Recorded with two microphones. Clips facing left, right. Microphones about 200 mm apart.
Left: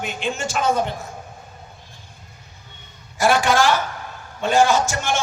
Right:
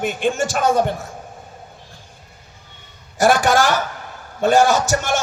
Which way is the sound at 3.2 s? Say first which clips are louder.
Right 2 dB; 45° right (ahead or behind).